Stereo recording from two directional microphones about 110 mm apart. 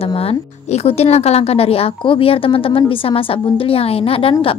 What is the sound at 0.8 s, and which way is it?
A woman's voice, 70° left (ahead or behind).